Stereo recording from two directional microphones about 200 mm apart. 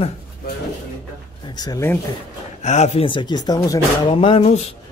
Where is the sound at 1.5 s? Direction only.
20° left (ahead or behind).